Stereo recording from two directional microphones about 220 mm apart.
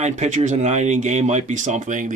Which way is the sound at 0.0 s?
30° right (ahead or behind).